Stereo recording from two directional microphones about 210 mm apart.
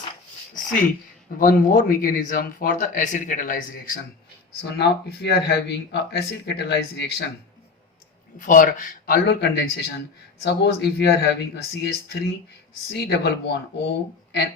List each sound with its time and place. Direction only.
1.4 s speech: 40° left (ahead or behind)
4.6 s speech: 55° left (ahead or behind)
8.4 s speech: 40° left (ahead or behind)